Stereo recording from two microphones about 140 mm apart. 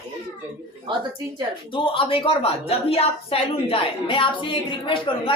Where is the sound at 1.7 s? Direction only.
40° left (ahead or behind).